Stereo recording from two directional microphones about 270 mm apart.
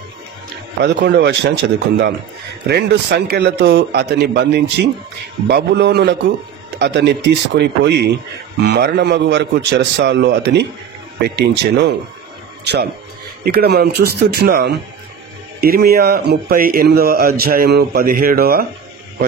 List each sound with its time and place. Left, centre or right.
0.8 s speech: right
13.4 s speech: right